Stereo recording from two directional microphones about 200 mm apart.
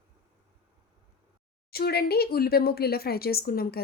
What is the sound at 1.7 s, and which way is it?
Speech, 50° left (ahead or behind).